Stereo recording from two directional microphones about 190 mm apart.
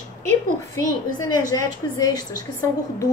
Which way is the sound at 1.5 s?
20° left (ahead or behind).